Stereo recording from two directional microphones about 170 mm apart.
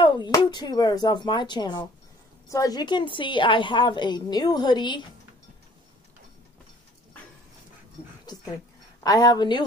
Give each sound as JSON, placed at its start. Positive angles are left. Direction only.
{"t": 0.0, "sound": "a woman's voice", "side_deg": 25}
{"t": 9.0, "sound": "a woman's voice", "side_deg": 20}